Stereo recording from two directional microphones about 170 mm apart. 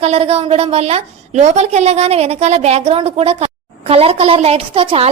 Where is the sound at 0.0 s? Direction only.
40° right (ahead or behind).